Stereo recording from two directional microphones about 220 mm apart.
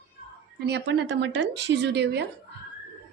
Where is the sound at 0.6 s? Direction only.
50° right (ahead or behind).